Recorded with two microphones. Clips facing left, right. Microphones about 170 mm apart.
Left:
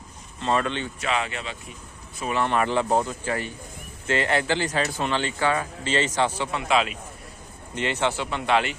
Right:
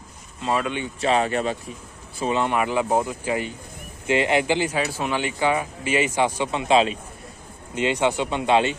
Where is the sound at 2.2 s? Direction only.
20° right (ahead or behind).